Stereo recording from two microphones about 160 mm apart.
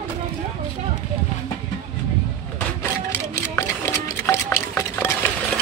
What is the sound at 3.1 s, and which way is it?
Music, 15° left (ahead or behind).